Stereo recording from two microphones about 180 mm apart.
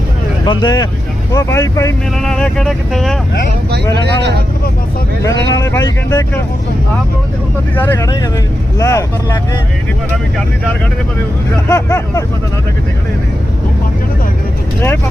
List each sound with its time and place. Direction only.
0.4 s speech: 25° left (ahead or behind)
2.1 s speech: 5° left (ahead or behind)
3.9 s speech: 70° right (ahead or behind)
5.2 s speech: 15° left (ahead or behind)
7.8 s speech: 15° left (ahead or behind)
11.7 s speech: 15° left (ahead or behind)